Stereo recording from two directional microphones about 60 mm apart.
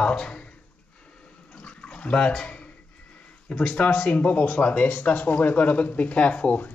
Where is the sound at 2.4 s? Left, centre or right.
Centre.